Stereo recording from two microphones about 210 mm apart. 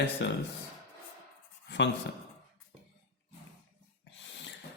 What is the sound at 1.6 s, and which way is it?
Writing, 55° left (ahead or behind).